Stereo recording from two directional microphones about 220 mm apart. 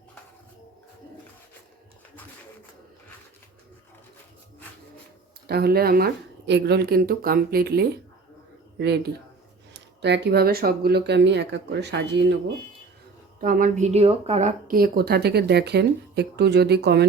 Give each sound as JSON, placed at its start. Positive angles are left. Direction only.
{"t": 5.5, "sound": "speech", "side_deg": -45}
{"t": 9.7, "sound": "speech", "side_deg": -50}
{"t": 13.4, "sound": "speech", "side_deg": -40}